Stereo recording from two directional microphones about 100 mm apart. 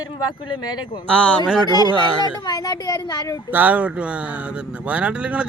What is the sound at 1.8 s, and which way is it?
Speech, 40° left (ahead or behind).